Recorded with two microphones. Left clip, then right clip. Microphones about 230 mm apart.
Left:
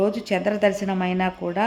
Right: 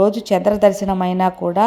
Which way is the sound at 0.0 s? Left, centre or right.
Centre.